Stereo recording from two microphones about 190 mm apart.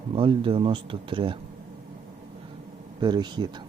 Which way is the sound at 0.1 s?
25° right (ahead or behind).